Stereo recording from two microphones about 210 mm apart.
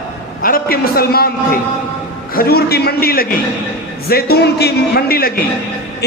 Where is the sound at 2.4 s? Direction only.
45° left (ahead or behind).